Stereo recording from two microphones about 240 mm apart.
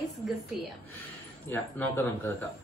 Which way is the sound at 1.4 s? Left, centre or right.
Centre.